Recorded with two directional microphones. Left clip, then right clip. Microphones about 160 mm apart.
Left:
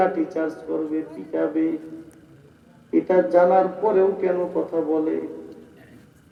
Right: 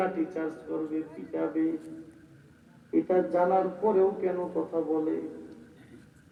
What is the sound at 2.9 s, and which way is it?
Speech, 50° left (ahead or behind).